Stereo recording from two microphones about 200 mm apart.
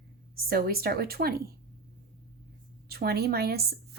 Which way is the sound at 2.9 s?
50° right (ahead or behind).